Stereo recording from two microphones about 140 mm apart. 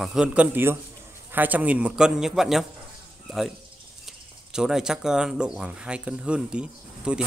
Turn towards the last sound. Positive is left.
turn(degrees=-5)  # may be behind; listen again after turning